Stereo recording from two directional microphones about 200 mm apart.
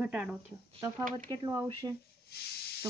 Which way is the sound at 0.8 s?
20° right (ahead or behind).